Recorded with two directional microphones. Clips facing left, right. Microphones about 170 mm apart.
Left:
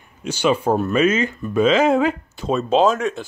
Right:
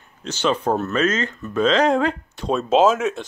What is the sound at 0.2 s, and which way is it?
Speech, 10° left (ahead or behind).